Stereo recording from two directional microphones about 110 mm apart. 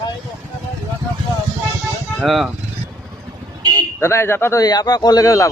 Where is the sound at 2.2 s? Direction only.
Centre (ahead or behind).